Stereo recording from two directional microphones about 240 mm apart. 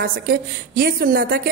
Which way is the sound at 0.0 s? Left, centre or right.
Right.